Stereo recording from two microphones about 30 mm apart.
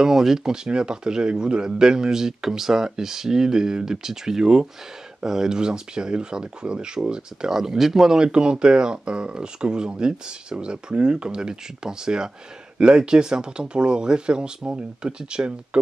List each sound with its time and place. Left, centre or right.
0.0 s speech: centre
0.5 s speech: right
7.4 s speech: centre
8.2 s speech: right